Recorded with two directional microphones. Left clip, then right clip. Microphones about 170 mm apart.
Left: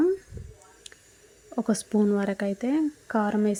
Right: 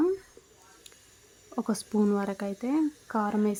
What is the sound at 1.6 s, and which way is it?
Speech, 10° left (ahead or behind).